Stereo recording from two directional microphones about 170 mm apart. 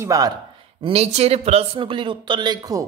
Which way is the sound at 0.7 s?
35° right (ahead or behind).